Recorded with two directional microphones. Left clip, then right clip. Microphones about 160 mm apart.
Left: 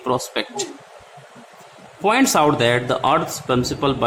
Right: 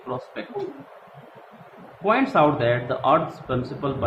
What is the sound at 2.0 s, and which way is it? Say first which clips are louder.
Speech: left 3 dB; 40° left (ahead or behind).